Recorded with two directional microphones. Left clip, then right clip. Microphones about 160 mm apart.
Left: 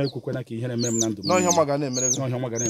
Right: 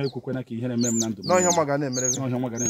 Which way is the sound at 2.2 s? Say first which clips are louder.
Left 1 dB; 75° left (ahead or behind).